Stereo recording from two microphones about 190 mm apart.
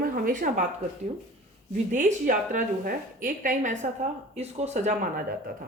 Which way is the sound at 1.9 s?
40° right (ahead or behind).